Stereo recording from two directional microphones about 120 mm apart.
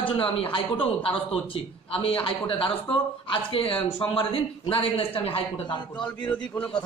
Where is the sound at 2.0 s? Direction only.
50° left (ahead or behind).